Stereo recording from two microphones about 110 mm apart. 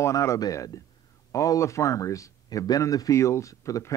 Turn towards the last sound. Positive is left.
turn(degrees=30)  # may be behind; listen again after turning